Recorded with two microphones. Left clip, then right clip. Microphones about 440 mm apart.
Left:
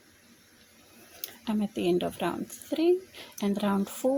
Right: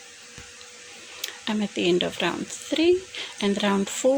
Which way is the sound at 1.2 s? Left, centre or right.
Left.